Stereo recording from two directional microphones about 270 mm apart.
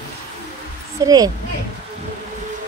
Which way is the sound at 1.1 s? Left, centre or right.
Centre.